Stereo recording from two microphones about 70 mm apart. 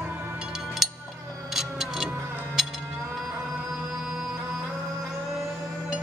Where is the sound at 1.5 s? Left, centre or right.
Centre.